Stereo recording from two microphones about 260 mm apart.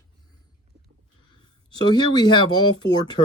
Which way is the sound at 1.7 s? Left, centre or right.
Centre.